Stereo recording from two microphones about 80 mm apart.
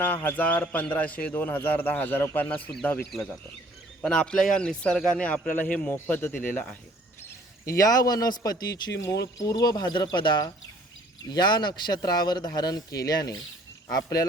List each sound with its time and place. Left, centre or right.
0.1 s a man's voice: left
4.0 s a man's voice: centre
7.6 s a man's voice: left
10.2 s a man's voice: left